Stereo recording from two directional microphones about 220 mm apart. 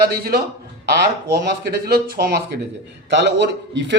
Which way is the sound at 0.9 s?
45° right (ahead or behind).